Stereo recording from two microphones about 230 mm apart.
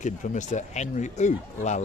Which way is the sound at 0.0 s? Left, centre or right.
Left.